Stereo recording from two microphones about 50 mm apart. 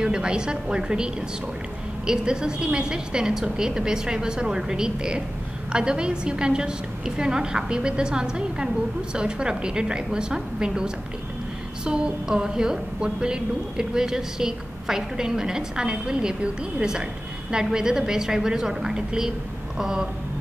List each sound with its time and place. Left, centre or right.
0.0 s a woman's voice: centre
17.5 s a woman's voice: centre